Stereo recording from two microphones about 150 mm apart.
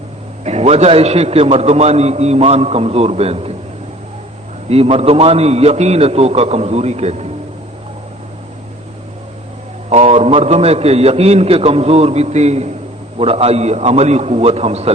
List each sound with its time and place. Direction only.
0.4 s a man's voice: 45° right (ahead or behind)
4.7 s a man's voice: 40° right (ahead or behind)
9.9 s a man's voice: 45° right (ahead or behind)